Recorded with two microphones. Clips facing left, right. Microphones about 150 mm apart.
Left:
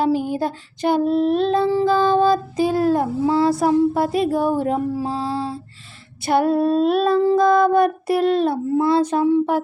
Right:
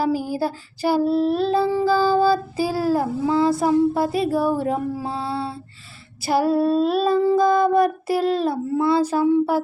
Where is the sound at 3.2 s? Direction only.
35° left (ahead or behind).